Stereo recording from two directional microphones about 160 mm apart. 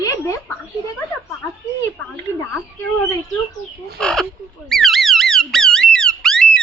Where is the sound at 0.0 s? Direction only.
20° left (ahead or behind).